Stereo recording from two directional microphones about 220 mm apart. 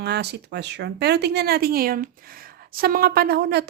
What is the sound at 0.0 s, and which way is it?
Speech, 50° right (ahead or behind).